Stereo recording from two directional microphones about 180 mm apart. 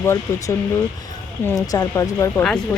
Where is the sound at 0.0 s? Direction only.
15° left (ahead or behind).